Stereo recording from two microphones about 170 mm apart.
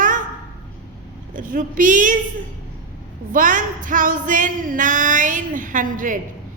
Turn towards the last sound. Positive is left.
turn(degrees=-50)  # may be behind; listen again after turning